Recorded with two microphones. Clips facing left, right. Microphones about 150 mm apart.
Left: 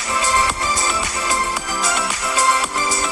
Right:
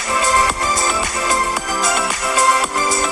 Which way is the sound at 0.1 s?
50° right (ahead or behind).